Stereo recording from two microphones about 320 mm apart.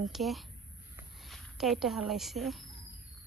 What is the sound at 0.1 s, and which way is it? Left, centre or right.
A woman's voice, centre.